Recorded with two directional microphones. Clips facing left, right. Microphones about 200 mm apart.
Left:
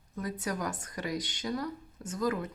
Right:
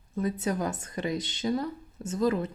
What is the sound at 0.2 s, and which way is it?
Speech, 25° right (ahead or behind).